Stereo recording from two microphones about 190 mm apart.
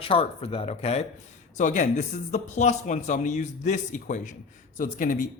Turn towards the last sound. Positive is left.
turn(degrees=45)  # may be behind; listen again after turning